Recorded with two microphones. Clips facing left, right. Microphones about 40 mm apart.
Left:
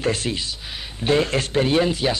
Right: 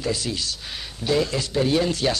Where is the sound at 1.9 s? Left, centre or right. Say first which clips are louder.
Left 1 dB; centre.